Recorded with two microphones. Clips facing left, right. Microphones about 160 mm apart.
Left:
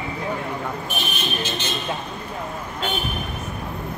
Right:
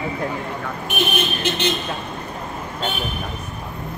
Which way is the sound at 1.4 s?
60° right (ahead or behind).